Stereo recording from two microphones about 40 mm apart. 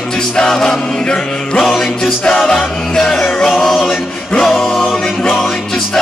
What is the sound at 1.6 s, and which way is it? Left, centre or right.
Music, centre.